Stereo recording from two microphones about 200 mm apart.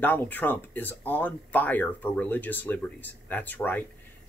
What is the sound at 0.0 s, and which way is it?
Speech, 10° left (ahead or behind).